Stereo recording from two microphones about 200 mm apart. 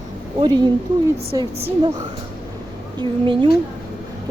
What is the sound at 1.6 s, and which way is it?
A woman's voice, 35° right (ahead or behind).